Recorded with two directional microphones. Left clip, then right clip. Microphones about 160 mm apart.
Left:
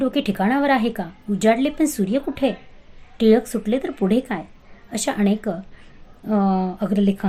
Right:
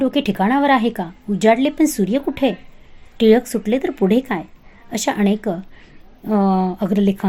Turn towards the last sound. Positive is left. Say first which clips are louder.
# right 3 dB
turn(degrees=-35)  # may be behind; listen again after turning